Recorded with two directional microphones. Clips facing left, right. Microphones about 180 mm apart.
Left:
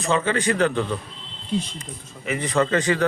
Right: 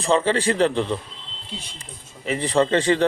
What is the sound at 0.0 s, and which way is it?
A man's voice, 30° right (ahead or behind).